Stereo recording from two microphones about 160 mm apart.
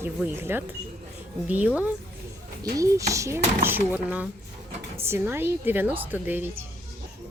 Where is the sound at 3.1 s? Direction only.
20° right (ahead or behind).